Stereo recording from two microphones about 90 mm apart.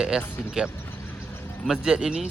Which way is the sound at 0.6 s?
10° right (ahead or behind).